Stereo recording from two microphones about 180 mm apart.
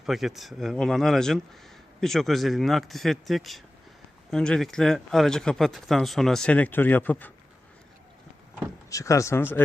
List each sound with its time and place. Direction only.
0.0 s speech: centre (ahead or behind)
8.9 s speech: 20° left (ahead or behind)